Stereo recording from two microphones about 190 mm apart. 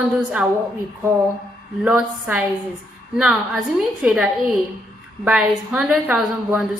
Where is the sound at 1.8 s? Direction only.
5° right (ahead or behind).